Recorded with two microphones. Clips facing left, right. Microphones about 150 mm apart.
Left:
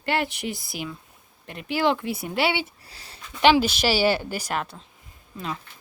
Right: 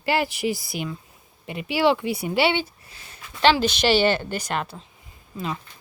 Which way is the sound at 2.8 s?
35° left (ahead or behind).